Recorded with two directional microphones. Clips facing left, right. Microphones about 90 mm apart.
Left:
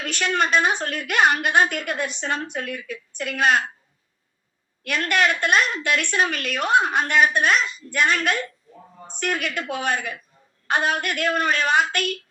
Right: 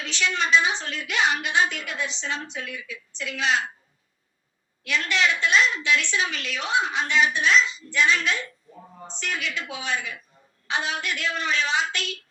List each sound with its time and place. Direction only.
0.0 s a woman's voice: 50° left (ahead or behind)
4.8 s a woman's voice: 50° left (ahead or behind)